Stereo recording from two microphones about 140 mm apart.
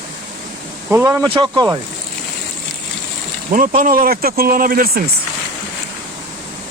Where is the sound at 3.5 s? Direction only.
75° right (ahead or behind).